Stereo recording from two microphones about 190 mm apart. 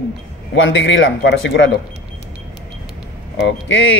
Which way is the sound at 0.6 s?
85° left.